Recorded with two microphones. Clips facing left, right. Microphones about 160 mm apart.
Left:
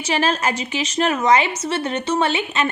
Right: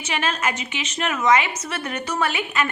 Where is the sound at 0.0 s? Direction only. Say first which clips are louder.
Left 5 dB; 35° left (ahead or behind).